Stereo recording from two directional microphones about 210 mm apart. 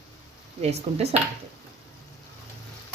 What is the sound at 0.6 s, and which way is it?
Dishes, 30° right (ahead or behind).